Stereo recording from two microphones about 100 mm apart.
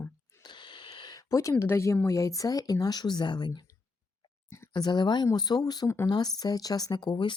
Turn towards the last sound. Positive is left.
turn(degrees=50)  # may be behind; listen again after turning